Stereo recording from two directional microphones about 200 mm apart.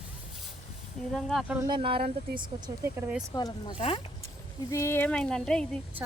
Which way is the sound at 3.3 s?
20° left (ahead or behind).